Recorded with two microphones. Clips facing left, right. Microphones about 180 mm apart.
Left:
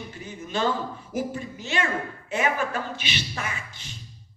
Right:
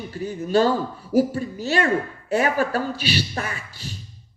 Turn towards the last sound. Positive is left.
turn(degrees=-35)  # may be behind; listen again after turning